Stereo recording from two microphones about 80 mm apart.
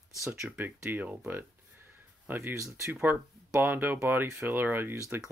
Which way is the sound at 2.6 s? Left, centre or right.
Right.